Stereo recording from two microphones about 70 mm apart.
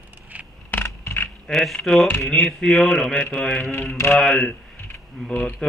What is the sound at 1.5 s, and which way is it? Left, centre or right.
Speech, centre.